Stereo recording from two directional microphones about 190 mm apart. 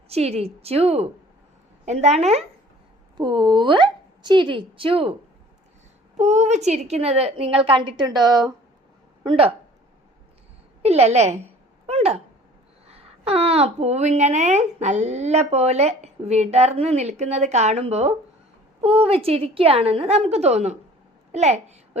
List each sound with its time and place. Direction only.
0.1 s a woman's voice: 35° right (ahead or behind)
3.2 s a woman's voice: 25° right (ahead or behind)
6.1 s a woman's voice: 35° right (ahead or behind)
10.8 s a woman's voice: 35° right (ahead or behind)